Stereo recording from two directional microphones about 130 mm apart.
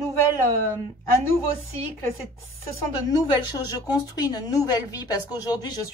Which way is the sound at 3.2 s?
30° left (ahead or behind).